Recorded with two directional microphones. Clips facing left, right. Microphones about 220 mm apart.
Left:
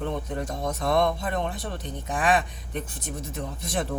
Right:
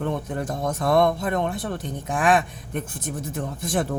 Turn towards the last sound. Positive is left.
turn(degrees=-50)  # may be behind; listen again after turning